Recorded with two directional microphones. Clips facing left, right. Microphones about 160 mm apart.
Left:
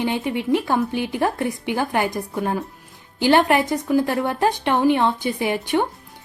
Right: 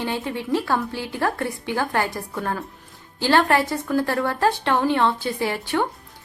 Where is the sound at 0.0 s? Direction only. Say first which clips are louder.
Left 4 dB; 15° left (ahead or behind).